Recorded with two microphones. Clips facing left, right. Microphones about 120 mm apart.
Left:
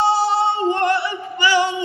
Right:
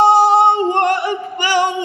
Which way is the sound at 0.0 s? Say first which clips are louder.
Right 7 dB; 50° right (ahead or behind).